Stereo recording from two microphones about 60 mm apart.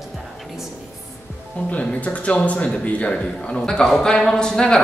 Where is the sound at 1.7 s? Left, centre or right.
Left.